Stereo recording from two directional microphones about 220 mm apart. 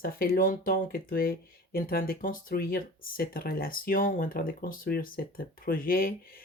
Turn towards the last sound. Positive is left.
turn(degrees=40)  # may be behind; listen again after turning